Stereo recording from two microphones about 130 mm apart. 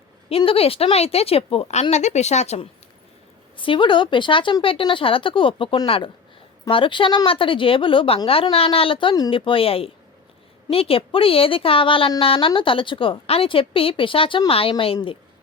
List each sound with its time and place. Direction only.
0.3 s a woman's voice: 45° left (ahead or behind)
3.6 s a woman's voice: 40° left (ahead or behind)